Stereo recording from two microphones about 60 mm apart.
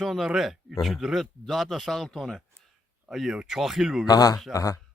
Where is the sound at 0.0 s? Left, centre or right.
Centre.